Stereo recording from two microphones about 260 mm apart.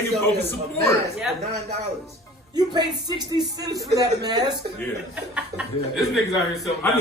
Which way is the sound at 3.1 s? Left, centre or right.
Centre.